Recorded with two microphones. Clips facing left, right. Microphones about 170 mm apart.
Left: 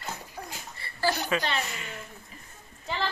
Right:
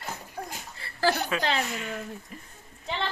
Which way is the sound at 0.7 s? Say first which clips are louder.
Right 2 dB; 90° right.